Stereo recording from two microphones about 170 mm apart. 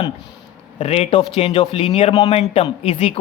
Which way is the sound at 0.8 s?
35° left (ahead or behind).